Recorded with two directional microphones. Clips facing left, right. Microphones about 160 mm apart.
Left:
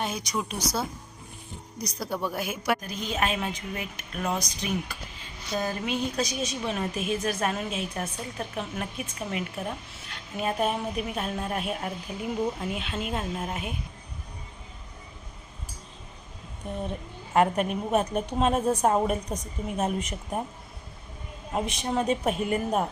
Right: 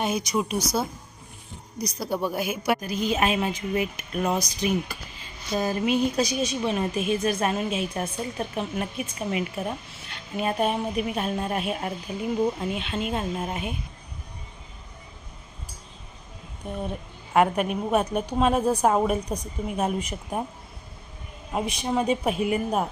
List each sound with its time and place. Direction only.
0.0 s speech: 10° right (ahead or behind)
2.2 s speech: 5° right (ahead or behind)
16.6 s speech: centre (ahead or behind)
21.5 s speech: centre (ahead or behind)